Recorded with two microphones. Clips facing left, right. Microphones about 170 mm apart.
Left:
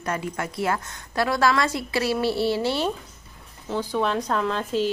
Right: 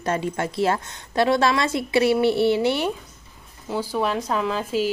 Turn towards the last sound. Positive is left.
turn(degrees=-5)  # may be behind; listen again after turning